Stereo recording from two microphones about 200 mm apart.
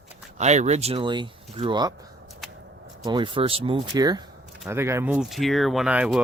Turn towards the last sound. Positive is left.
turn(degrees=-5)  # may be behind; listen again after turning